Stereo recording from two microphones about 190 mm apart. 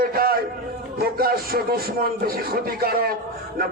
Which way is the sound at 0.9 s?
50° right (ahead or behind).